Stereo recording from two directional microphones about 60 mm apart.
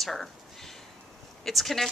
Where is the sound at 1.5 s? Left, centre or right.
Centre.